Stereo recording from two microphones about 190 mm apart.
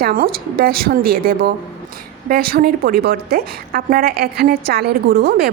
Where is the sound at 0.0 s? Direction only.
50° right (ahead or behind).